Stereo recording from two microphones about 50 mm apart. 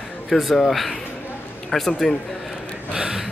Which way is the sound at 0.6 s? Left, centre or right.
Centre.